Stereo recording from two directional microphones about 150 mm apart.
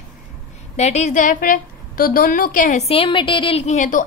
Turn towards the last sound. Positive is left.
turn(degrees=55)  # may be behind; listen again after turning